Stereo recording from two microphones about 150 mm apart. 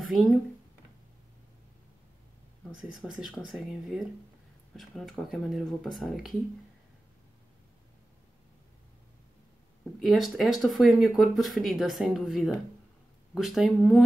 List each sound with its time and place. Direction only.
0.0 s speech: centre (ahead or behind)
2.7 s speech: centre (ahead or behind)
9.9 s speech: centre (ahead or behind)